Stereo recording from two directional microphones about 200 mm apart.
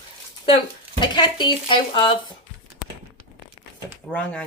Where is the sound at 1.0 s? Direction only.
20° left (ahead or behind).